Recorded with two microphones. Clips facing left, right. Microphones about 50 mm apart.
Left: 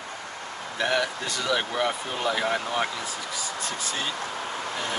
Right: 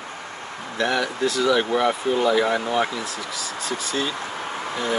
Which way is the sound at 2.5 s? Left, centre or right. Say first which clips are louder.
Right 4 dB; centre.